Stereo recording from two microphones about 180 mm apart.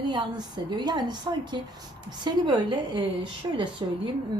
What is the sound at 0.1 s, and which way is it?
A woman's voice, 25° right (ahead or behind).